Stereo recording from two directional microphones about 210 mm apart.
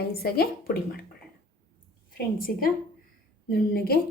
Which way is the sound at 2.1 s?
45° left (ahead or behind).